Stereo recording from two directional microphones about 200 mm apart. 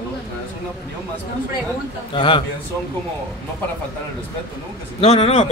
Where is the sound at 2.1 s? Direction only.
25° left (ahead or behind).